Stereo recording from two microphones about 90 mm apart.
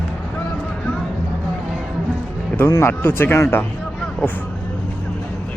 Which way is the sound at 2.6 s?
30° left (ahead or behind).